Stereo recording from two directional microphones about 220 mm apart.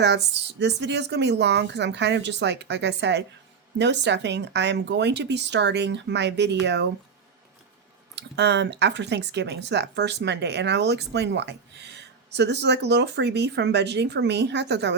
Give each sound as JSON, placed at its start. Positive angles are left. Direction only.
{"t": 0.6, "sound": "speech", "side_deg": -50}
{"t": 8.1, "sound": "speech", "side_deg": -50}